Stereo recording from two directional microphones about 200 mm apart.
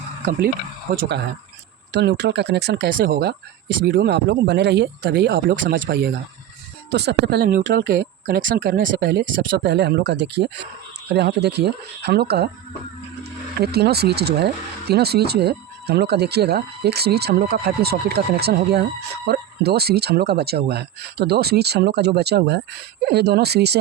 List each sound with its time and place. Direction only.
0.9 s speech: 45° right (ahead or behind)
1.9 s speech: 55° right (ahead or behind)
5.5 s speech: 45° right (ahead or behind)
5.8 s speech: 55° right (ahead or behind); by 8.9 s 40° right (ahead or behind)
9.0 s speech: 55° right (ahead or behind)
13.6 s speech: 55° right (ahead or behind)